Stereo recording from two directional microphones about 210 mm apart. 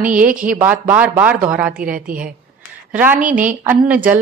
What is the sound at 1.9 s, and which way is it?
Speech, 40° right (ahead or behind).